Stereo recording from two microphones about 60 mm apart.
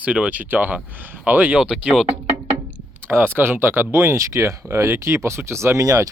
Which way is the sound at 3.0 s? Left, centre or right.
Right.